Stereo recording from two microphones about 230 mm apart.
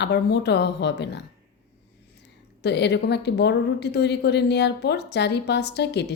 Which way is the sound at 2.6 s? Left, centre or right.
Left.